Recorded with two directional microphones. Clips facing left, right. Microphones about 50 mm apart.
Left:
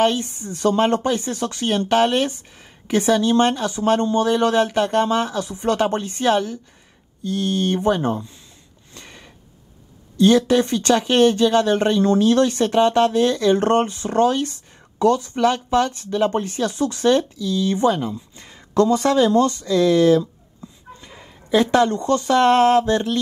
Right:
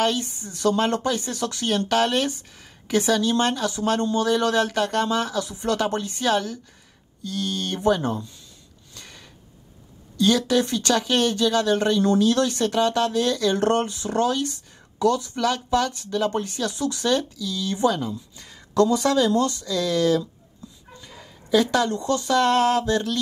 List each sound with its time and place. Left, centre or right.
0.0 s speech: left
8.9 s a sound: left
10.1 s speech: left